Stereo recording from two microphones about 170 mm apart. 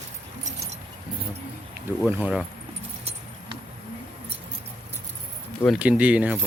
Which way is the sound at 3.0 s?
35° right (ahead or behind).